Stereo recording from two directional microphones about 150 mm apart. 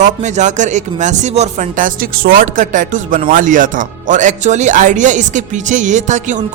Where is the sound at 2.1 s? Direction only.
75° right (ahead or behind).